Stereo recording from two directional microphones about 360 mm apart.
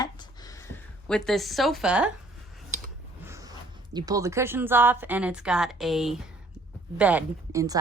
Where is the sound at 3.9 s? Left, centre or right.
Centre.